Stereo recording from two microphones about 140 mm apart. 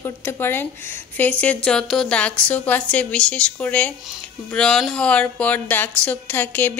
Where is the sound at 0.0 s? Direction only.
15° left (ahead or behind).